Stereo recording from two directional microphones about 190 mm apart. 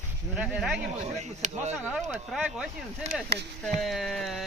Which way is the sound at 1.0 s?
35° right (ahead or behind).